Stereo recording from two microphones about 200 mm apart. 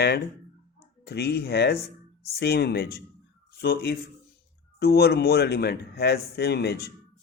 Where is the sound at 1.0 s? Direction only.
55° left (ahead or behind).